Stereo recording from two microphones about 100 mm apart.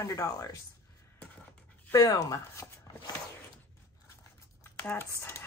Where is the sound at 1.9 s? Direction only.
35° left (ahead or behind).